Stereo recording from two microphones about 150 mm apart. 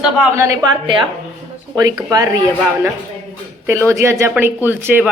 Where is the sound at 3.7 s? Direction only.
15° right (ahead or behind).